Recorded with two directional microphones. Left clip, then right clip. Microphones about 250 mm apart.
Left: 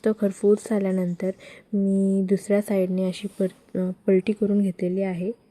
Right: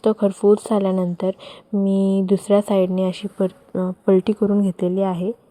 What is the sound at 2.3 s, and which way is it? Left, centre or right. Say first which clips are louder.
Speech: right 8 dB; centre.